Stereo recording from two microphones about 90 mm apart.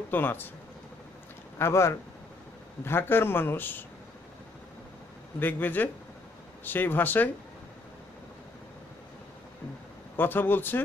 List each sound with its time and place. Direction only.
0.1 s speech: 20° left (ahead or behind)
1.6 s speech: 30° left (ahead or behind)
5.4 s speech: 20° left (ahead or behind)
10.1 s speech: 20° left (ahead or behind)